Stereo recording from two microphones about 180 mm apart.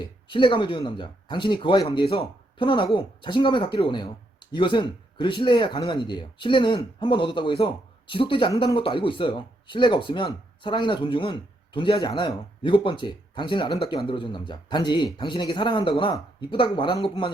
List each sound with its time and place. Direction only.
0.0 s speech: 25° left (ahead or behind)